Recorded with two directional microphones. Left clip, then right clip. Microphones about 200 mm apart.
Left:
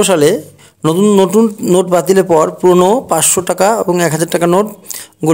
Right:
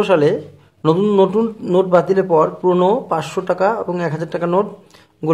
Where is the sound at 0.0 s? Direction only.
35° left (ahead or behind).